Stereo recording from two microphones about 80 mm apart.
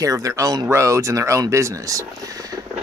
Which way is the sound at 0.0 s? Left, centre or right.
Right.